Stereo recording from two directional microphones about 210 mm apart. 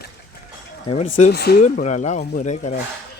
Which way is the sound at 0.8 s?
25° left (ahead or behind).